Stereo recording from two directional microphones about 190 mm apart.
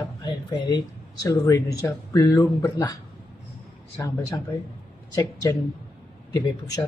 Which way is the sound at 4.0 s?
20° left (ahead or behind).